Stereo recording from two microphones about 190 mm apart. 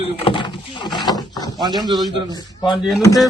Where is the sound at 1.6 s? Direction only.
20° right (ahead or behind).